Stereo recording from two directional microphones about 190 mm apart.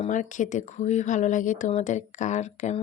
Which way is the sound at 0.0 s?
40° left (ahead or behind).